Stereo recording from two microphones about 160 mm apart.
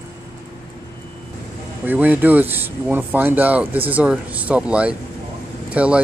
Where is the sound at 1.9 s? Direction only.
10° right (ahead or behind).